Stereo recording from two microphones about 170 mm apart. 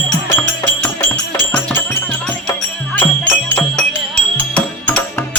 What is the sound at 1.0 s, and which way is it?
Music, 10° left (ahead or behind).